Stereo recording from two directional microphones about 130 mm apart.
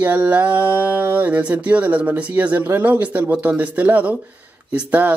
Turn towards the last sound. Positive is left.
turn(degrees=-15)  # may be behind; listen again after turning